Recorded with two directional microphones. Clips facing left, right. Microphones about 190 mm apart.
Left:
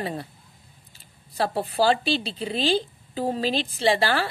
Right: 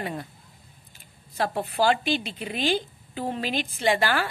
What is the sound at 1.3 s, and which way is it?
Speech, 35° left (ahead or behind).